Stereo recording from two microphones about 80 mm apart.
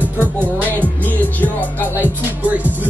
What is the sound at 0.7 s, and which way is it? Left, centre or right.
Music, left.